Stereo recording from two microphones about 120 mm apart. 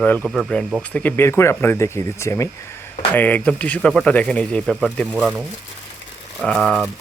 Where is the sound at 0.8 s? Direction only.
10° left (ahead or behind).